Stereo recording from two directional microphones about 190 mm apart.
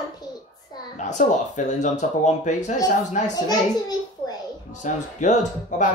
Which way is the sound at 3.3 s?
20° left (ahead or behind).